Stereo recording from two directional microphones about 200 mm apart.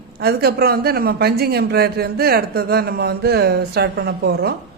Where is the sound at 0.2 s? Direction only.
50° right (ahead or behind).